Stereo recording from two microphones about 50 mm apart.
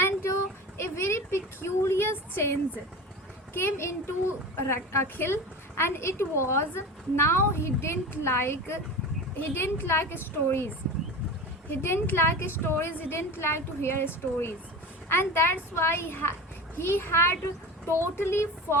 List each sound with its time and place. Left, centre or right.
0.0 s a sound: left
0.8 s a woman's voice: left
11.7 s a woman's voice: left
13.1 s a woman's voice: left